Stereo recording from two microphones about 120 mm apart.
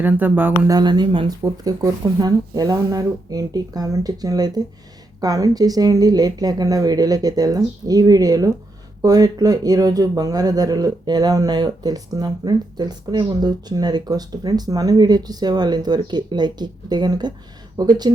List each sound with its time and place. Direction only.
0.0 s speech: 15° right (ahead or behind)
0.7 s speech: 35° right (ahead or behind)
1.6 s speech: 30° right (ahead or behind)